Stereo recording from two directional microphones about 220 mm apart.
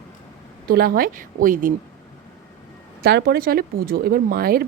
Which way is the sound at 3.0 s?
45° right (ahead or behind).